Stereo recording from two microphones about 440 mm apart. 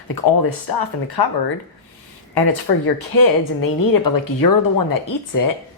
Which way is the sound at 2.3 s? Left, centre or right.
Left.